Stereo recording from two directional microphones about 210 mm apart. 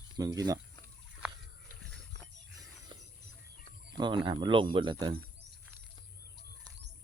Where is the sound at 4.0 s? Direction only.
25° right (ahead or behind).